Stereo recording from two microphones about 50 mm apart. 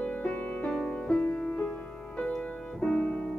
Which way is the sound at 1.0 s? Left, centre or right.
Left.